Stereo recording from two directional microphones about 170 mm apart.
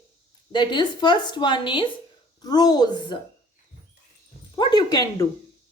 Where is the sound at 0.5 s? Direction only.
25° left (ahead or behind).